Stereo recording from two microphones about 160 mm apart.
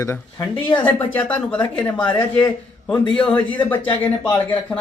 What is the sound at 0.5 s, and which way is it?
Speech, 30° left (ahead or behind).